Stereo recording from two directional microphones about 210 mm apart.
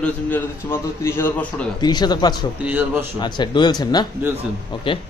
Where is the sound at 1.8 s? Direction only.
20° left (ahead or behind).